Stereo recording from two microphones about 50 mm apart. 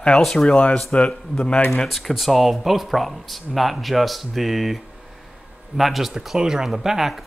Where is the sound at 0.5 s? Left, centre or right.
Left.